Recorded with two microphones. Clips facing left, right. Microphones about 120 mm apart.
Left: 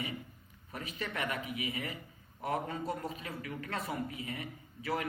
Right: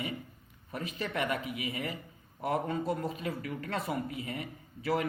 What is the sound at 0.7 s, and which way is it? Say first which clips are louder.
Speech: right 4 dB; 35° right (ahead or behind).